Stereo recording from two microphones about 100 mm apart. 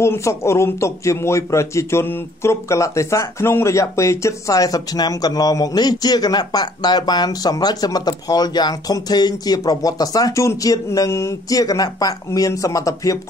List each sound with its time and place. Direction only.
0.0 s speech: 30° left (ahead or behind)